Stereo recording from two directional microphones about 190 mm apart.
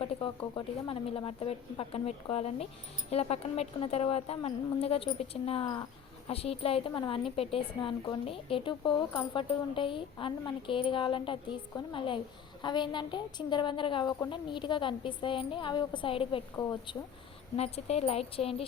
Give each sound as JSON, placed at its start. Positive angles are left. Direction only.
{"t": 0.0, "sound": "a woman's voice", "side_deg": 25}
{"t": 17.6, "sound": "a woman's voice", "side_deg": 35}